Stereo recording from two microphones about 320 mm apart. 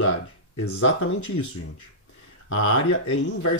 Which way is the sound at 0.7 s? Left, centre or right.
Left.